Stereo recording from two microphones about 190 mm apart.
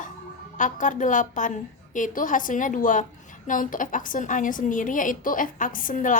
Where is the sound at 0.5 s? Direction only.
40° left (ahead or behind).